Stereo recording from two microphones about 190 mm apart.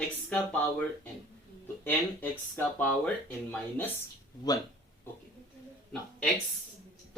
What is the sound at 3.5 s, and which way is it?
Speech, 10° left (ahead or behind).